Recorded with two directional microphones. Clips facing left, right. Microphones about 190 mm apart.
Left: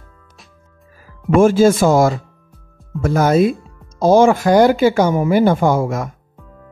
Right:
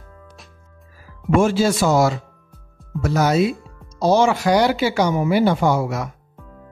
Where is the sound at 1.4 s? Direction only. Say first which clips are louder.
Left 8 dB; 50° left (ahead or behind).